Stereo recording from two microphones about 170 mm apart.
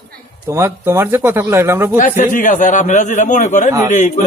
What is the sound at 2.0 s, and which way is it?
A man's voice, 50° left (ahead or behind).